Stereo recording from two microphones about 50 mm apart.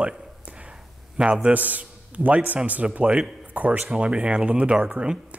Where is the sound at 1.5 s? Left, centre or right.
Right.